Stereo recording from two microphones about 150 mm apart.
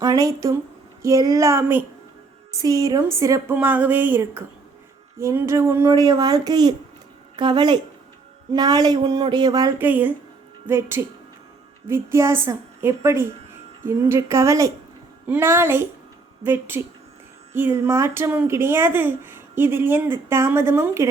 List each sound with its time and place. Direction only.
0.0 s speech: 25° right (ahead or behind)
9.7 s speech: 10° right (ahead or behind)